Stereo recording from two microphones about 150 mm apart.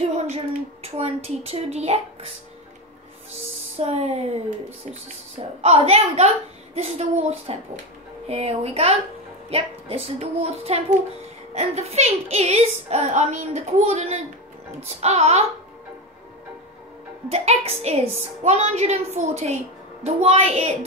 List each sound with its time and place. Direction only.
0.0 s speech: 45° right (ahead or behind)
3.7 s a woman's voice: 45° right (ahead or behind)
5.6 s a woman's voice: 40° right (ahead or behind)
17.3 s a woman's voice: 45° right (ahead or behind)